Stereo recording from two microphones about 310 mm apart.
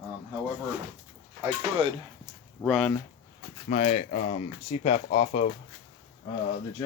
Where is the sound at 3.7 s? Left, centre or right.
Left.